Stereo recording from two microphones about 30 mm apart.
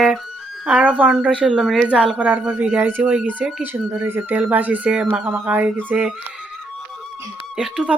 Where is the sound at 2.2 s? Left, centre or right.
Right.